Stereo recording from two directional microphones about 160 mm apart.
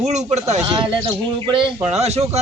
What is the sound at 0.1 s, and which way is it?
Speech, 45° right (ahead or behind).